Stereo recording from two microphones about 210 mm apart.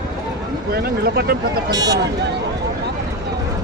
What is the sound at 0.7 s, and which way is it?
Speech, 50° right (ahead or behind).